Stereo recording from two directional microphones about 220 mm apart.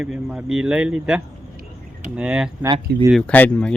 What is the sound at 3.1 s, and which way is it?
Speech, 5° left (ahead or behind).